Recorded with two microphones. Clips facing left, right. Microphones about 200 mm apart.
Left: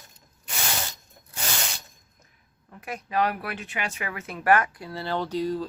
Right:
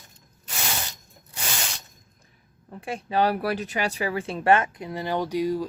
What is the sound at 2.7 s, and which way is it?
Speech, 30° right (ahead or behind).